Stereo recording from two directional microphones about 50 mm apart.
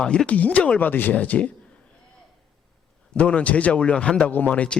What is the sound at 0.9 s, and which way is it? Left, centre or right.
Speech, left.